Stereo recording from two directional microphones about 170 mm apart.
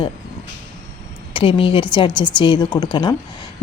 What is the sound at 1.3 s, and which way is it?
Speech, 30° left (ahead or behind).